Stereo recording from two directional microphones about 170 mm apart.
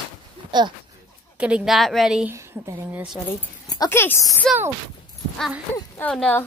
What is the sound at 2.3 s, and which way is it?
Speech, 15° right (ahead or behind).